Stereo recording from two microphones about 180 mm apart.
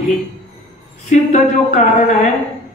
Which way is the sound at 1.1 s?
40° left (ahead or behind).